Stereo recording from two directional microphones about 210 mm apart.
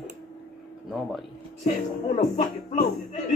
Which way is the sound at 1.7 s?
35° left (ahead or behind).